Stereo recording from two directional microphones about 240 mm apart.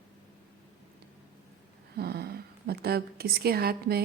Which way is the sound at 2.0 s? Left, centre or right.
Right.